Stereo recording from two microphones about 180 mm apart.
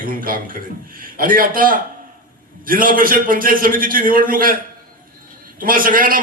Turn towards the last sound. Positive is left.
turn(degrees=-50)  # may be behind; listen again after turning